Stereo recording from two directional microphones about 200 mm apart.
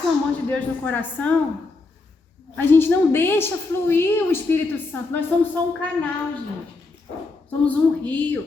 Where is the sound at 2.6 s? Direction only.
10° left (ahead or behind).